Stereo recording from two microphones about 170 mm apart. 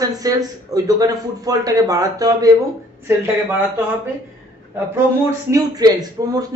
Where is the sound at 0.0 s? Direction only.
20° right (ahead or behind).